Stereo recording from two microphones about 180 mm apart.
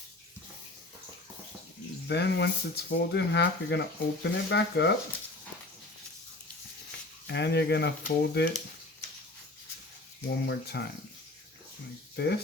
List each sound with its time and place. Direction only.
2.0 s speech: 70° left (ahead or behind)
7.3 s speech: 70° left (ahead or behind)
10.2 s speech: 70° left (ahead or behind)
12.1 s speech: 65° left (ahead or behind)